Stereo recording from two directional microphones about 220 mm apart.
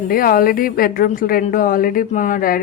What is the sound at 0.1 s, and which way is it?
A woman's voice, 40° left (ahead or behind).